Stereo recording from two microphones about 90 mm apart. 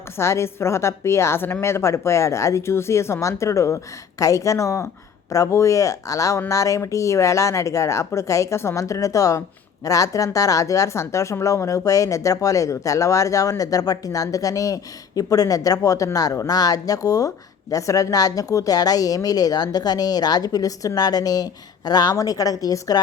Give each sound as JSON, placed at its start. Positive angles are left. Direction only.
{"t": 0.2, "sound": "speech", "side_deg": 30}